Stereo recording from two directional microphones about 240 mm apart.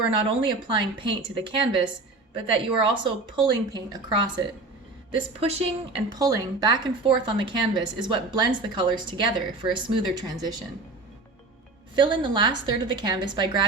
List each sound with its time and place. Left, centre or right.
0.1 s speech: right
6.1 s speech: centre
11.9 s speech: centre